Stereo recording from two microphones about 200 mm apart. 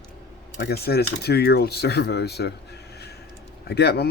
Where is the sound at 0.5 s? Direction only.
55° left (ahead or behind).